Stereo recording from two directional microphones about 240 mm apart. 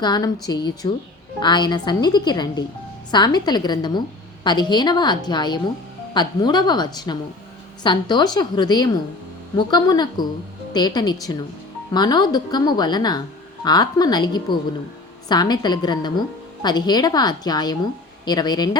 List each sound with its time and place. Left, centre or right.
0.0 s speech: centre